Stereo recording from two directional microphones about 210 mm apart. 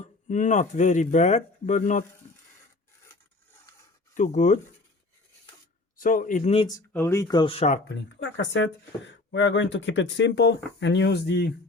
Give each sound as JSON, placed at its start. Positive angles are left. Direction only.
{"t": 0.0, "sound": "speech", "side_deg": 35}
{"t": 3.1, "sound": "rub", "side_deg": 10}
{"t": 4.1, "sound": "speech", "side_deg": 35}
{"t": 6.0, "sound": "speech", "side_deg": 40}
{"t": 6.7, "sound": "speech", "side_deg": 15}
{"t": 7.9, "sound": "speech", "side_deg": 60}